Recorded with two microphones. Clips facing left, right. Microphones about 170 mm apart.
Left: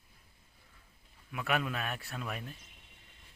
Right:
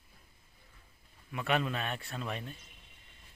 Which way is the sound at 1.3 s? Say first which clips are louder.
Right 2 dB; 5° left (ahead or behind).